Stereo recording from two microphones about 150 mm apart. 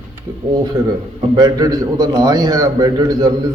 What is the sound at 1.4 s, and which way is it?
A man's voice, 25° right (ahead or behind).